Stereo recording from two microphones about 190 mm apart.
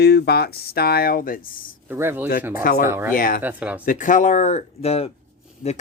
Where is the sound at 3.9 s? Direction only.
40° left (ahead or behind).